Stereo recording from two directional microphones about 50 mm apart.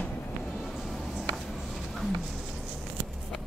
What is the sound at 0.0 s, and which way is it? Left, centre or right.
Vehicle, centre.